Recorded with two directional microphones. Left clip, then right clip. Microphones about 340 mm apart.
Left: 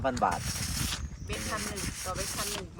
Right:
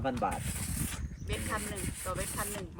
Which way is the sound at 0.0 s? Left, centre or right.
Left.